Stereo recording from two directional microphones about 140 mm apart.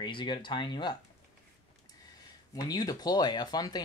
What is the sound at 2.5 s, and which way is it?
Speech, 30° left (ahead or behind).